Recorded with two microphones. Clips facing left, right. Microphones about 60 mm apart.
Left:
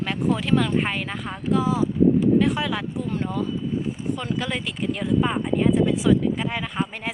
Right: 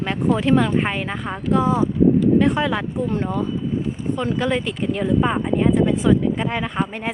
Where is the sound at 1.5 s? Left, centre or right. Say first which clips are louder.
Right 3 dB; right.